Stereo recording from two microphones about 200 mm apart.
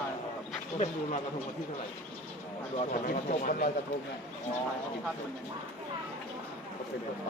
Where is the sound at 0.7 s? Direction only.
35° left (ahead or behind).